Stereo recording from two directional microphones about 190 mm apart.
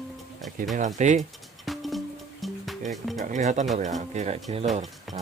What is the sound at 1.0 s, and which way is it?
Speech, 40° right (ahead or behind).